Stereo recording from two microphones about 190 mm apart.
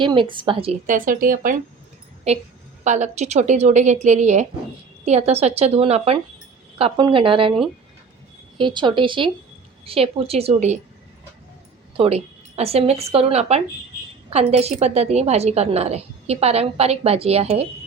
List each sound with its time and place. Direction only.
0.0 s a woman's voice: 25° right (ahead or behind)
0.9 s speech: 45° right (ahead or behind)
2.3 s a woman's voice: 35° right (ahead or behind)
8.5 s a woman's voice: 25° right (ahead or behind)
11.9 s a woman's voice: 35° right (ahead or behind)